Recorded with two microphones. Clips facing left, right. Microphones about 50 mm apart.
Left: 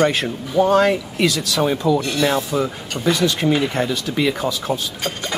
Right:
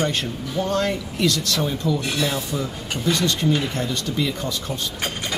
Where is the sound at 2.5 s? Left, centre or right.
Left.